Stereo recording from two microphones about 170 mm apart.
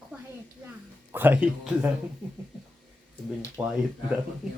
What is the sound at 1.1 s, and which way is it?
Speech, 10° right (ahead or behind).